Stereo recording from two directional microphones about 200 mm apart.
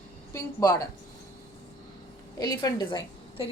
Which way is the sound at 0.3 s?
20° left (ahead or behind).